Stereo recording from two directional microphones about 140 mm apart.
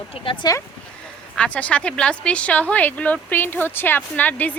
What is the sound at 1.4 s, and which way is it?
Speech, 10° left (ahead or behind).